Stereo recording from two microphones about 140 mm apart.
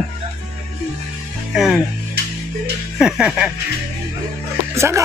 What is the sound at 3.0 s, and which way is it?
Music, 5° right (ahead or behind).